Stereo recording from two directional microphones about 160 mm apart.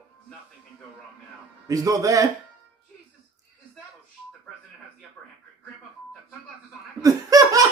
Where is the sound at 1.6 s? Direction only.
20° right (ahead or behind).